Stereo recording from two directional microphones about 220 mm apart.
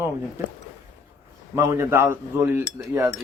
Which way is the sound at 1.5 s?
15° right (ahead or behind).